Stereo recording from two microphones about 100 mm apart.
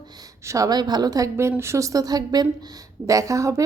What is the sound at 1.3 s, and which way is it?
A woman's voice, 25° right (ahead or behind).